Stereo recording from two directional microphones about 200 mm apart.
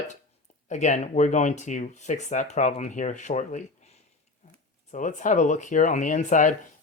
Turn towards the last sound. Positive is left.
turn(degrees=40)  # may be behind; listen again after turning